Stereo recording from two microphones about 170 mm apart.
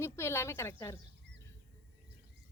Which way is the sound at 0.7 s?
15° left (ahead or behind).